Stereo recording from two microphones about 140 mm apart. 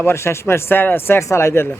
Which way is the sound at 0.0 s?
15° left (ahead or behind).